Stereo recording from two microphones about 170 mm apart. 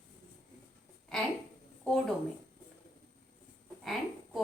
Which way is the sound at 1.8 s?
5° left (ahead or behind).